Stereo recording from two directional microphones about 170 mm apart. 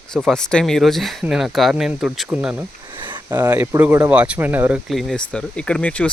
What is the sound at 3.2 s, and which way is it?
Speech, 20° right (ahead or behind).